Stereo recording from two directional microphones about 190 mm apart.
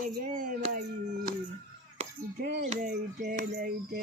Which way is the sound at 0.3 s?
45° right (ahead or behind).